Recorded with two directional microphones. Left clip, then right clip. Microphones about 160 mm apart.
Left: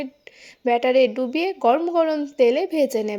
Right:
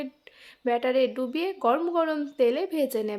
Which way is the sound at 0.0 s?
20° left (ahead or behind).